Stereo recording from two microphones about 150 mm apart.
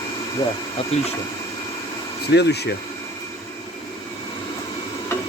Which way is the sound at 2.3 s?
90° left.